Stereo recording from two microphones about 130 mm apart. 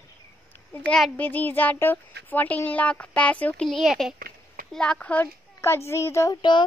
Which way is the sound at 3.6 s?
Centre (ahead or behind).